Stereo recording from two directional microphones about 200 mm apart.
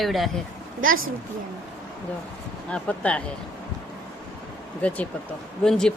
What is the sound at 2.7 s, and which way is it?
Speech, 5° left (ahead or behind).